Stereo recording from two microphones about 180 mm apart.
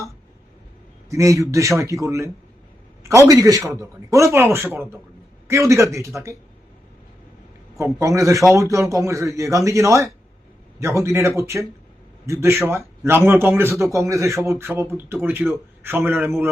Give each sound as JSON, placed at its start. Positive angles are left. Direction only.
{"t": 1.1, "sound": "a man's voice", "side_deg": -15}
{"t": 7.8, "sound": "a man's voice", "side_deg": -15}